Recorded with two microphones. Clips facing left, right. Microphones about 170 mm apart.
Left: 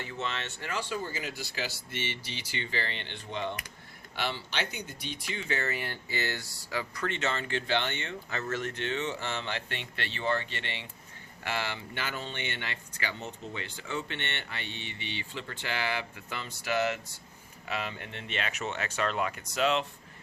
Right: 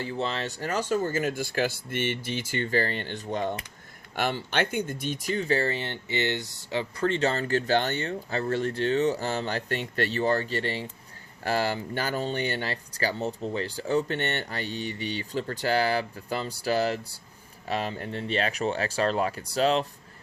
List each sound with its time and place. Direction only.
0.0 s speech: 35° right (ahead or behind)